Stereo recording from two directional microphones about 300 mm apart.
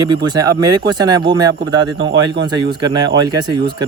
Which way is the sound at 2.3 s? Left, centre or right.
Right.